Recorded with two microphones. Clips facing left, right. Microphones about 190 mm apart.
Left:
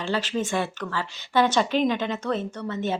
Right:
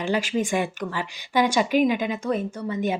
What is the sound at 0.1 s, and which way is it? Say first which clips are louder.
A woman's voice: right 2 dB; 10° right (ahead or behind).